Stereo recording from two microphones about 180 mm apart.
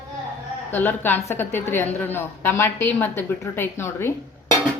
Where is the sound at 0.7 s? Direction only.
10° left (ahead or behind).